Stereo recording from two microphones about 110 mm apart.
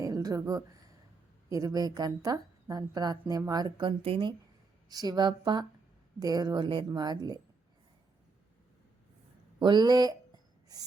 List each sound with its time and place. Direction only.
0.0 s a sound: 35° right (ahead or behind)
1.5 s a woman's voice: 30° right (ahead or behind)
4.0 s a woman's voice: 55° right (ahead or behind)
4.9 s a woman's voice: 35° right (ahead or behind)
9.6 s a woman's voice: 45° right (ahead or behind)